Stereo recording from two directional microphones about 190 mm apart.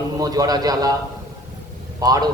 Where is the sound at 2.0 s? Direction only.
20° right (ahead or behind).